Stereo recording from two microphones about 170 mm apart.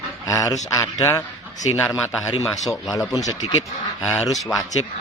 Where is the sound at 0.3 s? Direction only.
20° left (ahead or behind).